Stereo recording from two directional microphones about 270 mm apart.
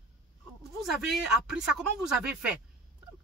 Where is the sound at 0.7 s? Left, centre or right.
Centre.